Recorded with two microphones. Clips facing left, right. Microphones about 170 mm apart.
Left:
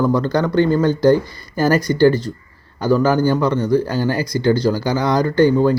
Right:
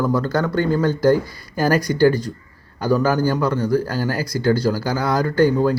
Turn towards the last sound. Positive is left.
turn(degrees=-5)  # may be behind; listen again after turning